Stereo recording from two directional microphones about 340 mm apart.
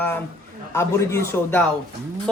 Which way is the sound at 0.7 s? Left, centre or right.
Centre.